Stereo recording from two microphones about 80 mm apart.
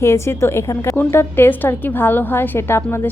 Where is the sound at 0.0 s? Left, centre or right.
Left.